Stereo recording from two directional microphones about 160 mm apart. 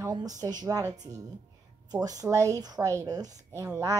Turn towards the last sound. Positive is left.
turn(degrees=-20)  # may be behind; listen again after turning